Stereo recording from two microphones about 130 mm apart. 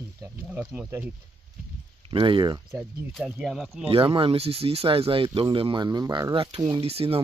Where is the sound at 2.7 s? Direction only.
15° right (ahead or behind).